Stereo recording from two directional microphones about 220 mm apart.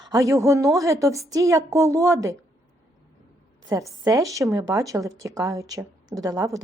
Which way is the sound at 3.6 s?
15° right (ahead or behind).